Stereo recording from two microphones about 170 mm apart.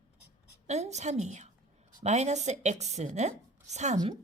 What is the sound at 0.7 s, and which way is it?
Speech, 40° right (ahead or behind).